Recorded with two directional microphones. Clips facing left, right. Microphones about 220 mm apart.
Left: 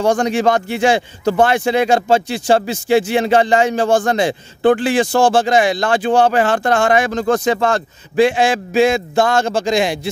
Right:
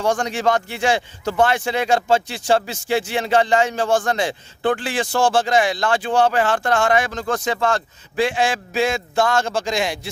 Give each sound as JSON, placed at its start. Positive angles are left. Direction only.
{"t": 0.2, "sound": "a man's voice", "side_deg": 15}